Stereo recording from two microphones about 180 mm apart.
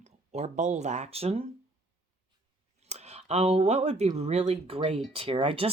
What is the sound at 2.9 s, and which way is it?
Speech, 35° right (ahead or behind).